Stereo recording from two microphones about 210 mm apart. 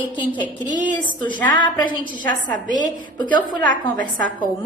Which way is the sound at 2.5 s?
40° right (ahead or behind).